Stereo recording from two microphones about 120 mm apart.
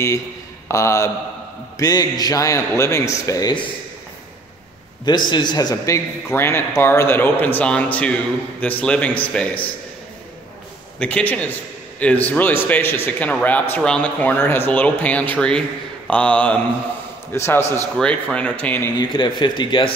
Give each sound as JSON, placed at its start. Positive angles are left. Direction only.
{"t": 0.7, "sound": "a man's voice", "side_deg": 25}
{"t": 5.0, "sound": "a man's voice", "side_deg": 40}
{"t": 11.0, "sound": "a man's voice", "side_deg": 10}
{"t": 17.9, "sound": "a man's voice", "side_deg": 10}
{"t": 18.9, "sound": "speech", "side_deg": 40}